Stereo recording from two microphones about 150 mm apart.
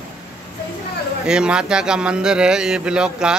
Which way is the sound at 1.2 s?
5° right (ahead or behind).